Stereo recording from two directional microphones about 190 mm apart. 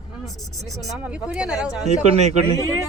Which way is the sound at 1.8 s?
35° right (ahead or behind).